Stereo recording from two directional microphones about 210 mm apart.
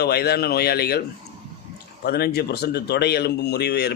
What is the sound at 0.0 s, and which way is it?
A man's voice, 50° left (ahead or behind).